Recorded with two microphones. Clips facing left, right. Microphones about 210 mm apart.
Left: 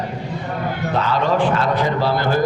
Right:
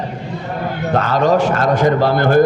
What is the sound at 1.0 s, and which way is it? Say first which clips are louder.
A man's voice: right 4 dB; 45° right (ahead or behind).